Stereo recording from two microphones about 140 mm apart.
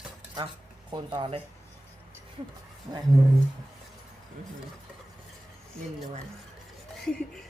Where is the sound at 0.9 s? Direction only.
35° right (ahead or behind).